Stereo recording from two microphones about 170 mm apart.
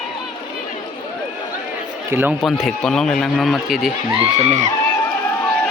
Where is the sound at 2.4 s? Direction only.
Centre (ahead or behind).